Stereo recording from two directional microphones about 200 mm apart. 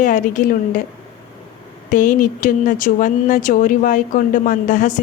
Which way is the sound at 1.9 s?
40° left (ahead or behind).